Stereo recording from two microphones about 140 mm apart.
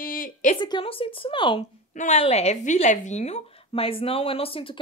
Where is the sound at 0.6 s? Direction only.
35° left (ahead or behind).